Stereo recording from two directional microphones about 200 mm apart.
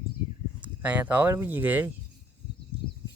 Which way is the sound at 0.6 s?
5° right (ahead or behind).